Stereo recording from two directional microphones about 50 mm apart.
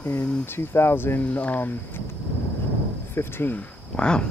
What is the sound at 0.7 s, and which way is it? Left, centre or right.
Speech, left.